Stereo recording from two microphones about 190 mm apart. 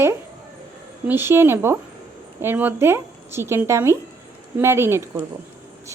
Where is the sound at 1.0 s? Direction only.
10° right (ahead or behind).